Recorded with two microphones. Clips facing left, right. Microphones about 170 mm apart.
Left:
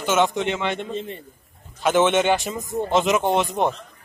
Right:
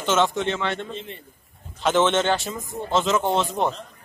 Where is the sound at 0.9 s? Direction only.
45° left (ahead or behind).